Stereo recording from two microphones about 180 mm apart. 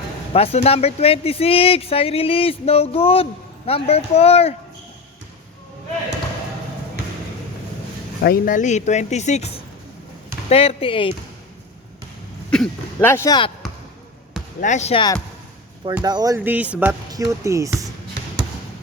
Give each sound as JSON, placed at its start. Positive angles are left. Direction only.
{"t": 0.3, "sound": "speech", "side_deg": 35}
{"t": 8.2, "sound": "speech", "side_deg": 55}
{"t": 12.5, "sound": "speech", "side_deg": 10}
{"t": 14.6, "sound": "speech", "side_deg": 40}
{"t": 16.0, "sound": "speech", "side_deg": -20}
{"t": 17.1, "sound": "speech", "side_deg": -20}